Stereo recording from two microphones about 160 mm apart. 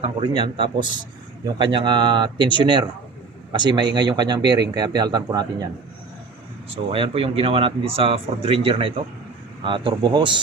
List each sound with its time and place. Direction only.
0.0 s speech: 30° right (ahead or behind)
6.9 s speech: 35° right (ahead or behind)